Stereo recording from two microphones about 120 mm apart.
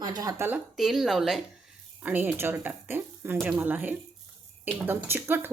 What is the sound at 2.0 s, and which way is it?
Speech, 15° right (ahead or behind).